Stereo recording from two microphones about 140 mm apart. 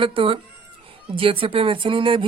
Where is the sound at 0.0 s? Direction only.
40° right (ahead or behind).